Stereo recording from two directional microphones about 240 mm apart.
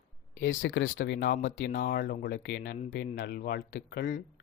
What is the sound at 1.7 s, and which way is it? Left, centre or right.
A man's voice, left.